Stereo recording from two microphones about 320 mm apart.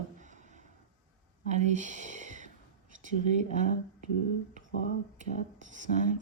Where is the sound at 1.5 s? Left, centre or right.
Right.